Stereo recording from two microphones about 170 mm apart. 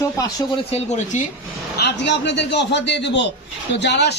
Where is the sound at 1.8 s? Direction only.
80° left.